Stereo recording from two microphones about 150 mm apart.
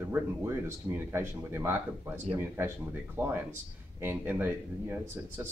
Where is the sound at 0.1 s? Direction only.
15° right (ahead or behind).